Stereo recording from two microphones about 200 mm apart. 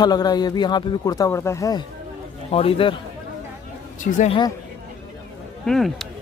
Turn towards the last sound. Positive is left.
turn(degrees=0)  # may be behind; listen again after turning